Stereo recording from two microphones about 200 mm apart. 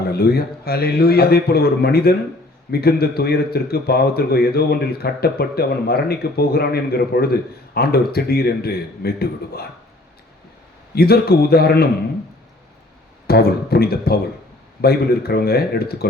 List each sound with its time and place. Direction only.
0.1 s a man's voice: 50° left (ahead or behind)
10.9 s a man's voice: 50° left (ahead or behind)
13.2 s a man's voice: 50° left (ahead or behind)